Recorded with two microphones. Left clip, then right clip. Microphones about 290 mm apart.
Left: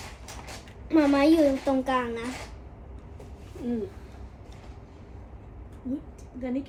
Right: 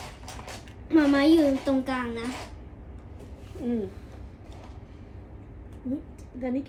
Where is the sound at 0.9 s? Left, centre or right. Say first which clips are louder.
Even; centre.